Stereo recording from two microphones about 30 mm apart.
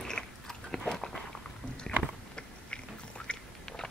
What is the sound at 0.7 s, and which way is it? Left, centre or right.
Biting, left.